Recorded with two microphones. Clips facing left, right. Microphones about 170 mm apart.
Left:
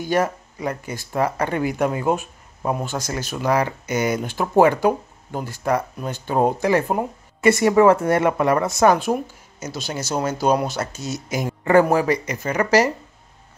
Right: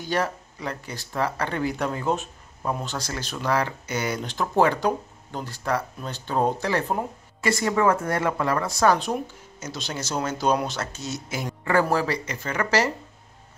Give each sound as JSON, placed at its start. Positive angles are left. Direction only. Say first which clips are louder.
{"t": 0.0, "sound": "speech", "louder": "left 5 dB", "side_deg": 10}
{"t": 7.4, "sound": "a woman's voice", "louder": "left 7 dB", "side_deg": 20}
{"t": 8.9, "sound": "speech", "louder": "left 4 dB", "side_deg": 5}